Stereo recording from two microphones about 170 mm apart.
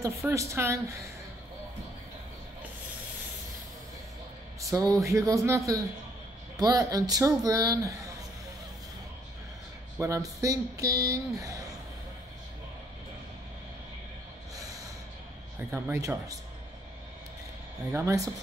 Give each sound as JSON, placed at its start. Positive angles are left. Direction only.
{"t": 0.0, "sound": "speech", "side_deg": -20}
{"t": 4.7, "sound": "speech", "side_deg": -20}
{"t": 9.9, "sound": "speech", "side_deg": -15}
{"t": 14.5, "sound": "snort", "side_deg": -20}
{"t": 15.7, "sound": "speech", "side_deg": -15}
{"t": 17.9, "sound": "speech", "side_deg": -15}